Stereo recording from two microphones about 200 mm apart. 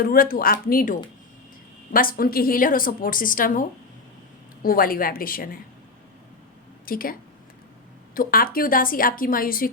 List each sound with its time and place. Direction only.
0.0 s a woman's voice: 45° left (ahead or behind)
6.8 s a woman's voice: 45° left (ahead or behind)